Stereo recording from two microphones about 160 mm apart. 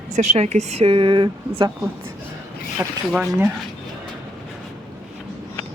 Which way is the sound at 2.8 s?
15° right (ahead or behind).